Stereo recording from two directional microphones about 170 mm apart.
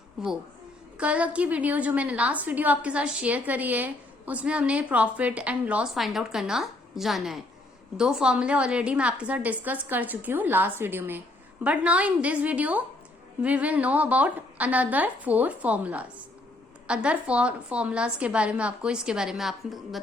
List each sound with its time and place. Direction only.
0.2 s a woman's voice: 5° right (ahead or behind)